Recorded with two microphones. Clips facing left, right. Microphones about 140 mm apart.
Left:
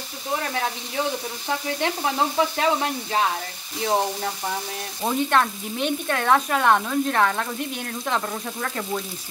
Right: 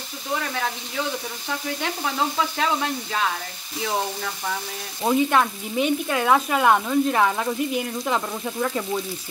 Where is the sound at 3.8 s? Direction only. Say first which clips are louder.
Left 3 dB; 30° left (ahead or behind).